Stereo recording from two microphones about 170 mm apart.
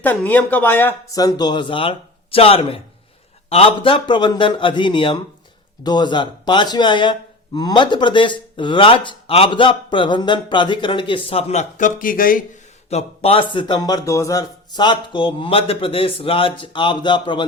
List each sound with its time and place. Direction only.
0.0 s speech: 10° left (ahead or behind)
1.2 s speech: 25° left (ahead or behind); by 12.4 s 55° left (ahead or behind)
12.9 s speech: 35° left (ahead or behind)